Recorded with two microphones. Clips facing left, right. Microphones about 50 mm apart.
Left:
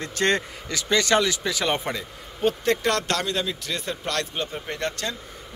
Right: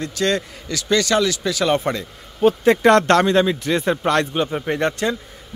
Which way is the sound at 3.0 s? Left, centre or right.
Right.